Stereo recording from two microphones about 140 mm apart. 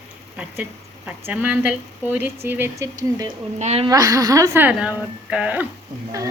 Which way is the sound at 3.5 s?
55° right (ahead or behind).